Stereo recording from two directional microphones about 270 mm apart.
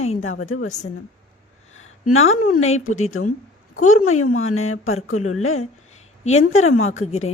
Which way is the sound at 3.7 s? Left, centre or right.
Left.